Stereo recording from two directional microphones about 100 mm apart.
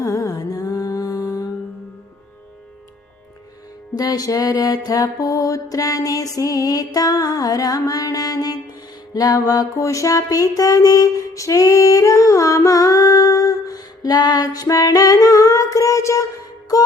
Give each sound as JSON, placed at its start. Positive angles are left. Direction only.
{"t": 0.0, "sound": "music", "side_deg": 35}
{"t": 3.9, "sound": "music", "side_deg": 40}